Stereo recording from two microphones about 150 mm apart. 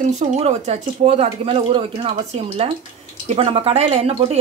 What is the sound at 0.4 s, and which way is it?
Speech, 45° right (ahead or behind).